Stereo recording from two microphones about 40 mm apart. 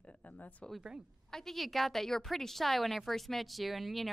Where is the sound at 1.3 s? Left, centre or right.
Centre.